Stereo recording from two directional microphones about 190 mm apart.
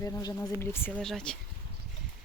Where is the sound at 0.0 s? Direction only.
20° left (ahead or behind); by 1.4 s 5° left (ahead or behind).